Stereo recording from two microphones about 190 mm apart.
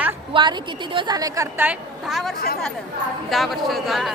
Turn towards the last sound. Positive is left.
turn(degrees=0)  # may be behind; listen again after turning